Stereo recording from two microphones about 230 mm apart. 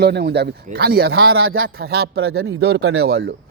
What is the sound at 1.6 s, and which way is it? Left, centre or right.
Speech, right.